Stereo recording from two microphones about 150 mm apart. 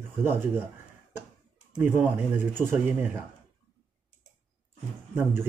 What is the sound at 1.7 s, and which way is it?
Speech, 10° right (ahead or behind).